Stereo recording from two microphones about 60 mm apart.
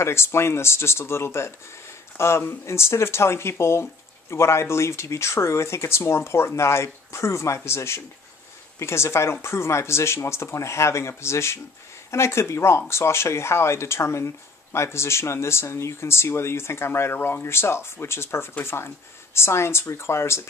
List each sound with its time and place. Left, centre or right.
0.0 s speech: left